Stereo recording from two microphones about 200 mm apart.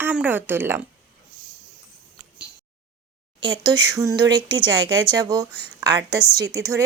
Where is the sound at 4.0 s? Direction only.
20° right (ahead or behind).